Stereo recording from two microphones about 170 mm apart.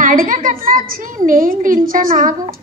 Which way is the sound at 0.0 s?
50° right (ahead or behind).